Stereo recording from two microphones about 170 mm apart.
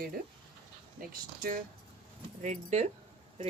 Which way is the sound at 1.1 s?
55° right (ahead or behind).